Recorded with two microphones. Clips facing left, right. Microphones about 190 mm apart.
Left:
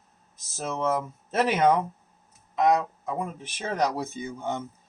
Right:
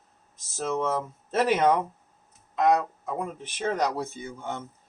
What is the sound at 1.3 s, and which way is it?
Speech, 10° left (ahead or behind).